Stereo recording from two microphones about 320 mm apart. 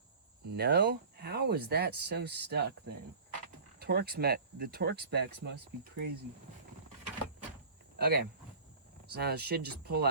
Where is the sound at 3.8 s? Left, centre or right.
Right.